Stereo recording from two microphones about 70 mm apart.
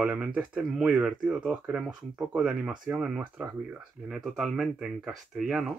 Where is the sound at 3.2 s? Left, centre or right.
Centre.